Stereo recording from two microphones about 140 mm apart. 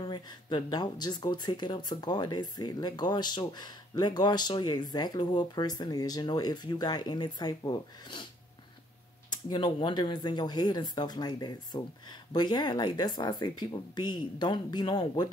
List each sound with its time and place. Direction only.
0.0 s speech: 30° left (ahead or behind)
9.5 s speech: 35° left (ahead or behind)